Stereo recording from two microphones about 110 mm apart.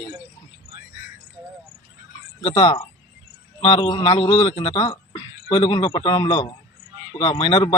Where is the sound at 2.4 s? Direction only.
50° left (ahead or behind).